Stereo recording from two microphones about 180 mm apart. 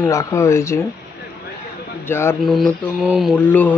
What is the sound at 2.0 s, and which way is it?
Speech, 15° left (ahead or behind).